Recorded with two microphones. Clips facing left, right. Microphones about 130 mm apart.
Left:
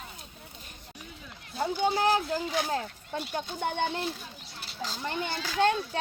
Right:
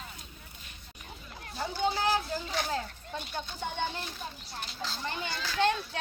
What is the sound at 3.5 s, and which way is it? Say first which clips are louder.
Speech: left 5 dB; 60° left (ahead or behind).